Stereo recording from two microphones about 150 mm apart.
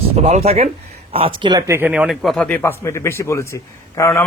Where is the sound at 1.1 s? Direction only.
35° right (ahead or behind).